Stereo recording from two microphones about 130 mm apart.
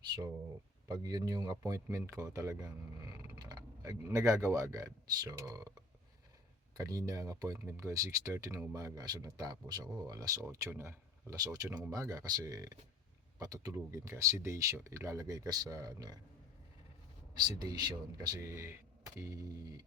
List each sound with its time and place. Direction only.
0.9 s speech: 30° right (ahead or behind)
6.7 s speech: 25° right (ahead or behind)
17.3 s speech: 35° right (ahead or behind)